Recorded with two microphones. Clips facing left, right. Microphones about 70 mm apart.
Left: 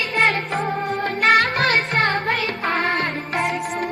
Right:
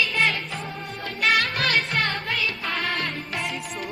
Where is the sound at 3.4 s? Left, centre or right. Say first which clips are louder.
Left 11 dB; left.